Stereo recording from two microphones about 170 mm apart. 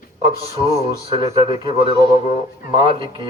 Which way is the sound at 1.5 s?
30° right (ahead or behind).